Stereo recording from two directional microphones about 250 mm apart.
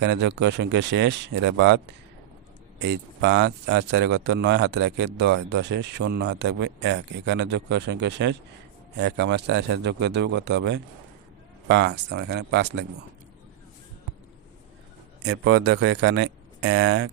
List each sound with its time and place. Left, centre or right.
0.0 s speech: right
2.8 s speech: right
15.3 s speech: right